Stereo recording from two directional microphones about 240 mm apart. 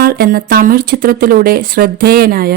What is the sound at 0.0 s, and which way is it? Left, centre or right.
Speech, right.